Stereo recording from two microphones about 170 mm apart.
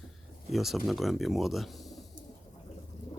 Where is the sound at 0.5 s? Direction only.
Centre (ahead or behind).